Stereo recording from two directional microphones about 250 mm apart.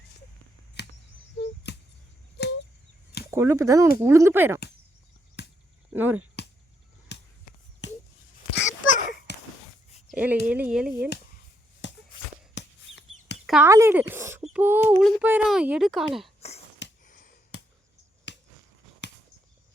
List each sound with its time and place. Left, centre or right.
0.8 s a sound: left
3.3 s speech: centre
5.4 s cricket: left
5.9 s speech: centre
7.1 s basketball bounce: left
8.5 s a sound: left
10.1 s a child's voice: centre
11.8 s shuffle: left
12.5 s a sound: left
13.5 s a child's voice: centre
17.1 s a sound: left
18.3 s finger snapping: left